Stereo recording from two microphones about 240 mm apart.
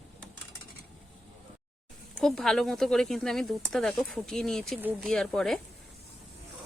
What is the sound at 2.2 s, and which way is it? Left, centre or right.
Speech, centre.